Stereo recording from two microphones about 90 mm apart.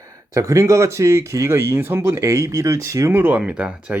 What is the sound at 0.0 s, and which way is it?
Speech, 35° right (ahead or behind).